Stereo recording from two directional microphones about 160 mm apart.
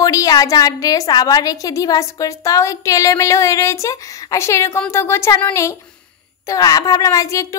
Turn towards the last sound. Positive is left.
turn(degrees=20)  # may be behind; listen again after turning